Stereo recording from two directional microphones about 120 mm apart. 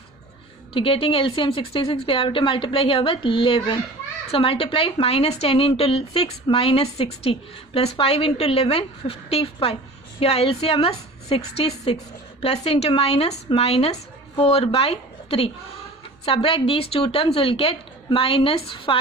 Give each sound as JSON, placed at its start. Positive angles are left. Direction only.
{"t": 0.7, "sound": "speech", "side_deg": 50}